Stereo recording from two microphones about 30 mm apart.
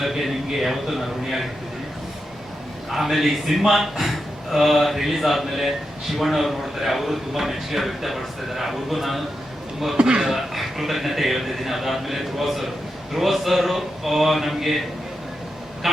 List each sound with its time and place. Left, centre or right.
0.6 s a man's voice: centre
2.9 s a man's voice: centre
10.0 s speech: right
10.3 s a man's voice: centre